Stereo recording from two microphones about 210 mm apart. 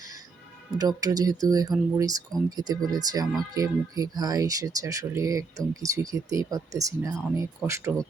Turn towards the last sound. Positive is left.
turn(degrees=-15)  # may be behind; listen again after turning